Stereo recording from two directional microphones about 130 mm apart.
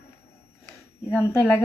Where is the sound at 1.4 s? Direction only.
15° left (ahead or behind).